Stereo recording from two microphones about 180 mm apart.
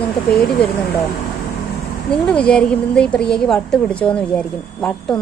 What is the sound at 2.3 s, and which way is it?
A woman's voice, 5° left (ahead or behind).